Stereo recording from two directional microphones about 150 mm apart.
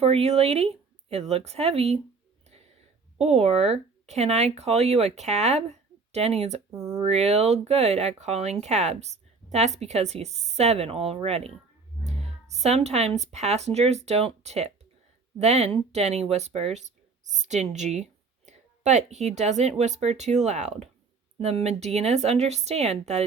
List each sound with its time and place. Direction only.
0.0 s speech: 45° right (ahead or behind)
3.2 s speech: 45° right (ahead or behind)
6.7 s speech: 25° right (ahead or behind)
7.0 s speech: 45° right (ahead or behind)